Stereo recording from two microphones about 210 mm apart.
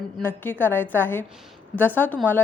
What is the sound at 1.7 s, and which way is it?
Speech, centre (ahead or behind).